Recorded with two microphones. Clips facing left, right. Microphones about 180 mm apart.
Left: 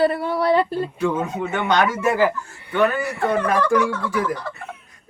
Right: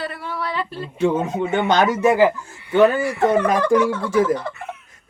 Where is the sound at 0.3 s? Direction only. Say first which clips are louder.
Left 6 dB; 40° left (ahead or behind).